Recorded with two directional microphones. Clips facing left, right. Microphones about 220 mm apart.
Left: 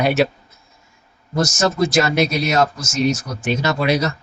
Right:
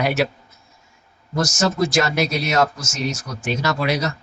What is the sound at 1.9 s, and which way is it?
Speech, 20° left (ahead or behind).